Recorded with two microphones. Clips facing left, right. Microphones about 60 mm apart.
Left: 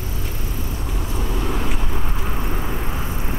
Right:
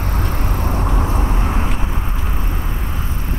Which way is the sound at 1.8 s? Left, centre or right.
Centre.